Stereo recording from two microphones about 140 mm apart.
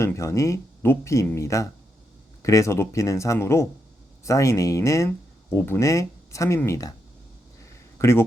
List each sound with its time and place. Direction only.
0.0 s speech: 20° left (ahead or behind)
7.9 s speech: 20° left (ahead or behind)